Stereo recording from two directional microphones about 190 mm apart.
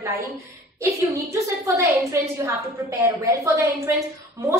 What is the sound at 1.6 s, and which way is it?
A woman's voice, 15° right (ahead or behind).